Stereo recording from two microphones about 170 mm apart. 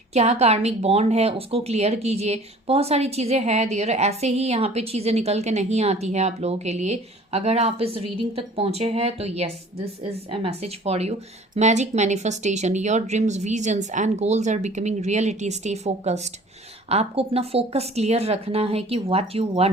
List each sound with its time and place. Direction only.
0.1 s speech: 40° right (ahead or behind)